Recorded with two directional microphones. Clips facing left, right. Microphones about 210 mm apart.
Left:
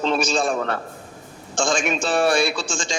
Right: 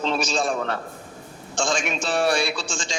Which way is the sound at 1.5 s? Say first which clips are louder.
Left 3 dB; 50° left (ahead or behind).